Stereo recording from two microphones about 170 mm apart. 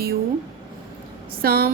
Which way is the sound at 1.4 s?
65° right (ahead or behind).